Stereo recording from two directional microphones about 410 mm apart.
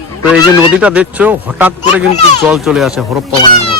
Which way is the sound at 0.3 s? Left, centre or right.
Centre.